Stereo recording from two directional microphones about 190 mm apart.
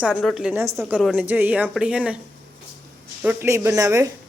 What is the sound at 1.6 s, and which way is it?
Speech, 5° right (ahead or behind).